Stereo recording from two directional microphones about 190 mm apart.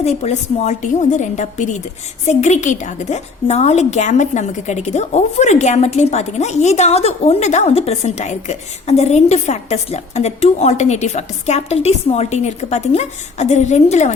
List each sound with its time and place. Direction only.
0.0 s a woman's voice: 35° left (ahead or behind)